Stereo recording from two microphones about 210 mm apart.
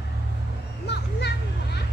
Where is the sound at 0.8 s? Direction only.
55° left (ahead or behind).